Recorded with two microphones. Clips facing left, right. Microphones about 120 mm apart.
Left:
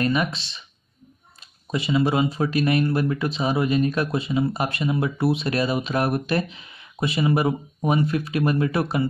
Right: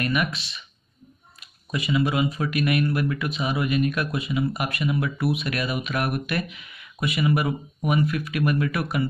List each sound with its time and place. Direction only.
0.0 s speech: 30° left (ahead or behind)